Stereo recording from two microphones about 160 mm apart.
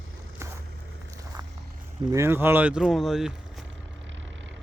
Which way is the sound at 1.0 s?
20° right (ahead or behind).